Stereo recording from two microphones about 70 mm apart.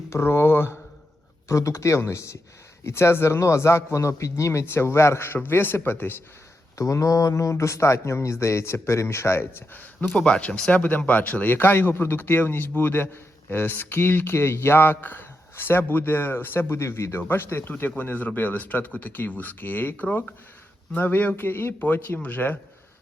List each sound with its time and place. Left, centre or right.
0.1 s speech: left
1.5 s speech: left
6.7 s speech: left
10.2 s speech: centre